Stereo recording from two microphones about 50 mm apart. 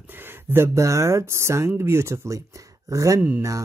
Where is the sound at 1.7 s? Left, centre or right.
Right.